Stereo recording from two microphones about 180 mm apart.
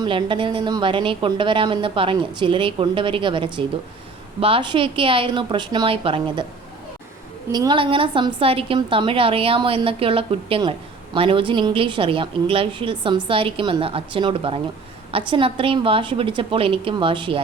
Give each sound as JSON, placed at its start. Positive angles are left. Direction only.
{"t": 0.0, "sound": "a woman's voice", "side_deg": -25}
{"t": 7.5, "sound": "a woman's voice", "side_deg": -25}